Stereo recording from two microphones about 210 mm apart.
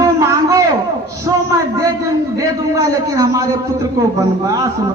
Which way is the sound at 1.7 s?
15° right (ahead or behind).